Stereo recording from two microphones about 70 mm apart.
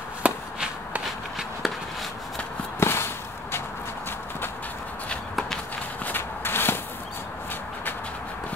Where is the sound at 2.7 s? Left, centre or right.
Left.